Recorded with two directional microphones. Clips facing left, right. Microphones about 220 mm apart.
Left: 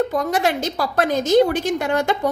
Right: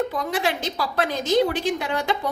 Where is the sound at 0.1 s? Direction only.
45° left (ahead or behind).